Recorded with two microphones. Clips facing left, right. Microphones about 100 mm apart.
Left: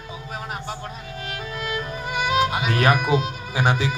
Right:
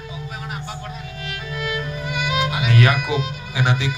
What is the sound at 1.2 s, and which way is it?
Music, 40° left (ahead or behind).